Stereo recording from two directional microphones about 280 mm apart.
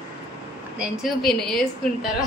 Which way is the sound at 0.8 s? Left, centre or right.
Centre.